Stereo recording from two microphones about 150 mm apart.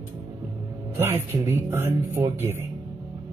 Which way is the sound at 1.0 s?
15° right (ahead or behind).